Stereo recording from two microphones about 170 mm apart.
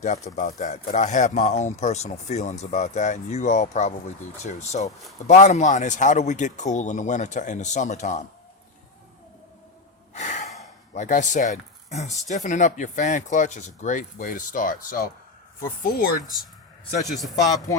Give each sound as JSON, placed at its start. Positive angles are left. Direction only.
{"t": 0.3, "sound": "speech", "side_deg": 45}
{"t": 10.2, "sound": "gasp", "side_deg": 45}
{"t": 10.9, "sound": "speech", "side_deg": 45}
{"t": 17.1, "sound": "a man's voice", "side_deg": 0}